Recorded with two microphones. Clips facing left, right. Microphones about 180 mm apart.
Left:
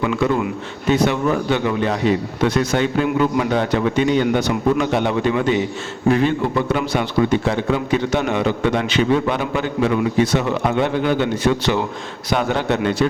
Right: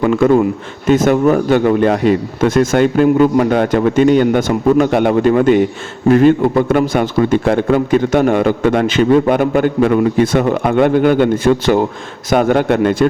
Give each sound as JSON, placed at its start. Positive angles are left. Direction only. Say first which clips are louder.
{"t": 0.0, "sound": "a man's voice", "louder": "right 8 dB", "side_deg": -50}